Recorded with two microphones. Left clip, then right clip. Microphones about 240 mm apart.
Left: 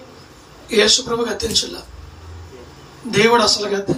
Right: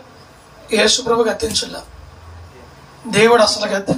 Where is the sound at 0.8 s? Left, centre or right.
Right.